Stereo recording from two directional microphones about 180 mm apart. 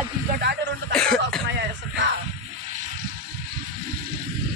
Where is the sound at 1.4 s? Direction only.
75° right (ahead or behind).